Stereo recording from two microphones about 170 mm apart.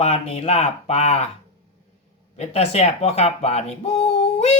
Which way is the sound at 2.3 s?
40° left (ahead or behind).